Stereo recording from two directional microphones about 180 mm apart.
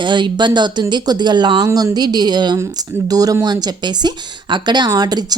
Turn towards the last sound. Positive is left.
turn(degrees=-20)  # may be behind; listen again after turning